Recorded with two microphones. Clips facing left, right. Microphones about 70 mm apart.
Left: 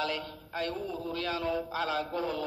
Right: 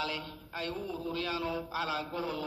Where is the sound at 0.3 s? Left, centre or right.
Left.